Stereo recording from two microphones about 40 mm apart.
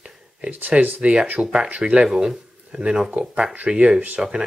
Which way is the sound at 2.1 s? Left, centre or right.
Centre.